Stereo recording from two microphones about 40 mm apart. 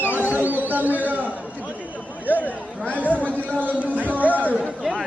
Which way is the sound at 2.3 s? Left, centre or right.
Left.